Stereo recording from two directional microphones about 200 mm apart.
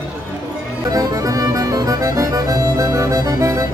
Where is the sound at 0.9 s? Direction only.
15° right (ahead or behind).